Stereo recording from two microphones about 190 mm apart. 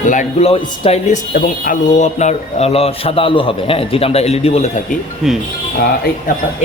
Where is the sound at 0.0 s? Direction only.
40° left (ahead or behind).